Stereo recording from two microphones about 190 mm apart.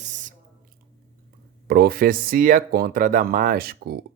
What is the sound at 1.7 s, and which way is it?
Speech, 50° right (ahead or behind).